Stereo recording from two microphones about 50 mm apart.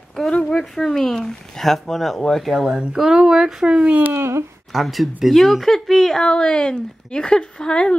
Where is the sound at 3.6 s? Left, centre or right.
Right.